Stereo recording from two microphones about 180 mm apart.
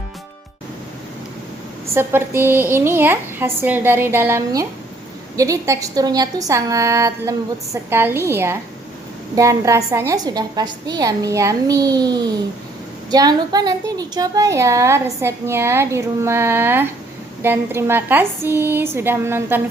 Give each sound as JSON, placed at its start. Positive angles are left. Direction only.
{"t": 1.9, "sound": "a woman's voice", "side_deg": -15}